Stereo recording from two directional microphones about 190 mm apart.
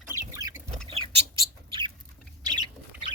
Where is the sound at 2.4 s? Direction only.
20° right (ahead or behind).